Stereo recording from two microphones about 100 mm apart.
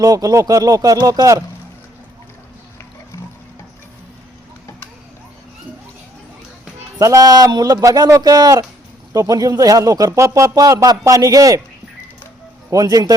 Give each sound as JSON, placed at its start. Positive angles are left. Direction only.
{"t": 0.0, "sound": "speech", "side_deg": -35}
{"t": 7.0, "sound": "speech", "side_deg": -35}
{"t": 12.7, "sound": "speech", "side_deg": -40}